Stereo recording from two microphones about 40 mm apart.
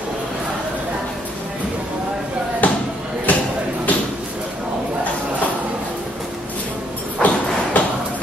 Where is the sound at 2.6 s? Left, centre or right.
Left.